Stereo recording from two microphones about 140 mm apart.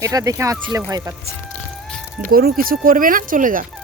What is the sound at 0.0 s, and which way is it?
Speech, 25° right (ahead or behind).